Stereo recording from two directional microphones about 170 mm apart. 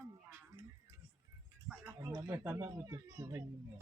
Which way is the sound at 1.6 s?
15° right (ahead or behind).